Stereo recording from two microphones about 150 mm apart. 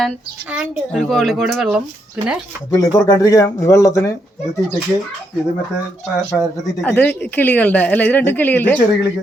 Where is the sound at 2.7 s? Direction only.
25° left (ahead or behind).